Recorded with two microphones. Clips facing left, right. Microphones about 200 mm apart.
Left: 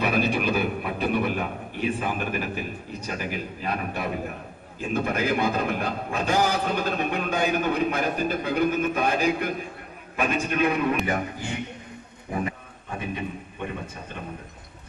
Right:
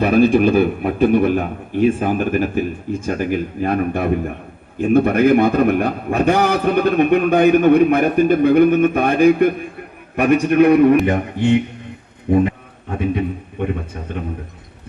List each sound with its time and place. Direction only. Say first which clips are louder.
0.0 s a man's voice: right 11 dB; 50° right (ahead or behind); by 11.1 s 65° right (ahead or behind)
12.3 s a man's voice: right 14 dB; 70° right (ahead or behind)